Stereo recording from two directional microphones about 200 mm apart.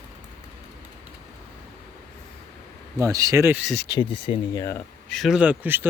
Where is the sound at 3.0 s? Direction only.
15° right (ahead or behind).